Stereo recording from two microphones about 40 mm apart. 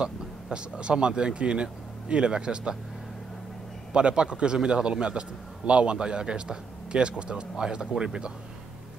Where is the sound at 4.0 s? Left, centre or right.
Right.